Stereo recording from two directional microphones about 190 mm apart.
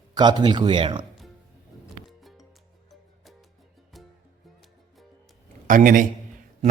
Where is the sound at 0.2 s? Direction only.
20° right (ahead or behind).